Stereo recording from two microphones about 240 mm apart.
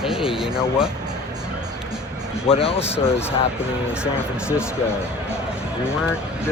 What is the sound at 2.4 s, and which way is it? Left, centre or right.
Speech, left.